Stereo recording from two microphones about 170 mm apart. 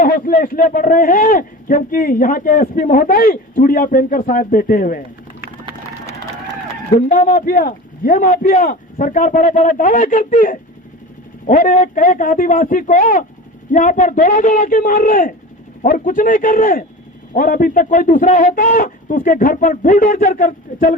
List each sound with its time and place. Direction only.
0.0 s speech: 55° left (ahead or behind)
7.1 s speech: 55° left (ahead or behind)